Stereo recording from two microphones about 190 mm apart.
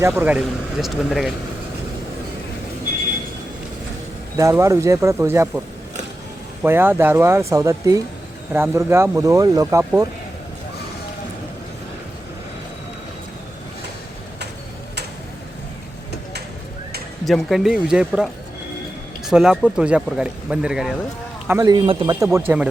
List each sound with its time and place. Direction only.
0.0 s speech: 10° right (ahead or behind)
4.4 s speech: 15° right (ahead or behind)
6.6 s speech: 10° right (ahead or behind)
17.2 s speech: centre (ahead or behind)
21.4 s speech: 15° right (ahead or behind)